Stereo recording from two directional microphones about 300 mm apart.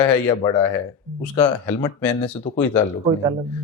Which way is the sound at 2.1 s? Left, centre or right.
Centre.